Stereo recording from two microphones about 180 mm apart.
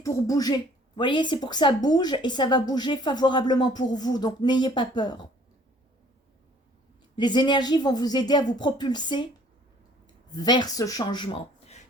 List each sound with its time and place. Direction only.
0.0 s a woman's voice: 20° left (ahead or behind)
7.2 s a woman's voice: 25° left (ahead or behind)
10.3 s a woman's voice: 25° left (ahead or behind)